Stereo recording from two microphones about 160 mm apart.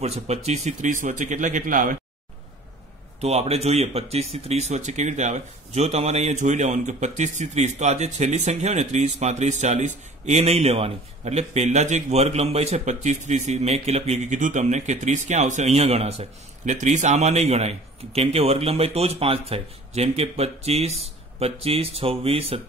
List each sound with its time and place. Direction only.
0.0 s speech: 40° right (ahead or behind)
3.2 s speech: 40° right (ahead or behind)